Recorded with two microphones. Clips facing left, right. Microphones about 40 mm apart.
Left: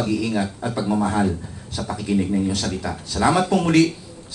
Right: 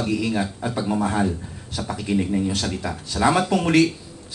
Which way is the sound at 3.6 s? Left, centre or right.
Right.